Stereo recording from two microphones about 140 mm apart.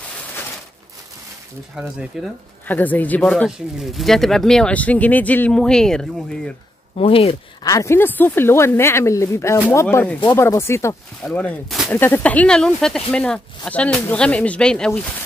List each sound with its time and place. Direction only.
1.8 s speech: 5° right (ahead or behind)
2.7 s speech: 10° left (ahead or behind)
3.2 s speech: centre (ahead or behind)
7.0 s speech: 40° left (ahead or behind)
7.6 s speech: 20° left (ahead or behind)
11.2 s speech: 5° left (ahead or behind)